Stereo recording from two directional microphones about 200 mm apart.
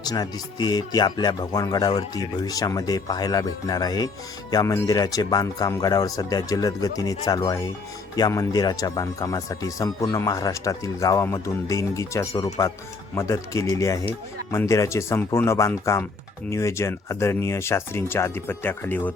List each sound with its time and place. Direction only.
0.0 s speech: 20° left (ahead or behind)